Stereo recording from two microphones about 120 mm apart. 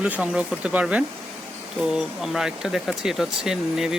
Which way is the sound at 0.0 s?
10° right (ahead or behind).